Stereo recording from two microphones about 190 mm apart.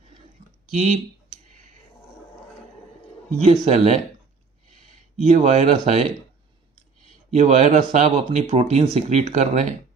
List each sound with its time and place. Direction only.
0.7 s typing: 40° right (ahead or behind)
3.4 s speech: 35° right (ahead or behind)
5.2 s speech: 35° right (ahead or behind)
7.3 s speech: 40° right (ahead or behind)